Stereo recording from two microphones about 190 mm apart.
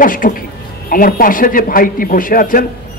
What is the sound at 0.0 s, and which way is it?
A man's voice, 45° left (ahead or behind).